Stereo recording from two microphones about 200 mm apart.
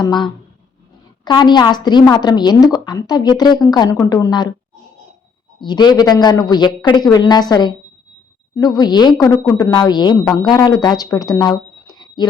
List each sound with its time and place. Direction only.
1.2 s a woman's voice: 20° left (ahead or behind)
5.5 s a woman's voice: 20° left (ahead or behind)